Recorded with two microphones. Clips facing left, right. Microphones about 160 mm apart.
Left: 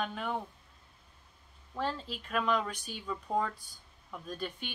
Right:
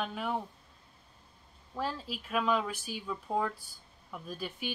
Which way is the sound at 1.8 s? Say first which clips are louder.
Even; 5° right (ahead or behind).